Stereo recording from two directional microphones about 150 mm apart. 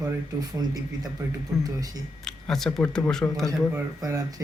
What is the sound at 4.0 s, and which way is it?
Speech, 25° right (ahead or behind).